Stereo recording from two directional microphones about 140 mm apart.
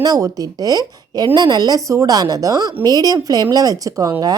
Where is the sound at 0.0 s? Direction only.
25° right (ahead or behind).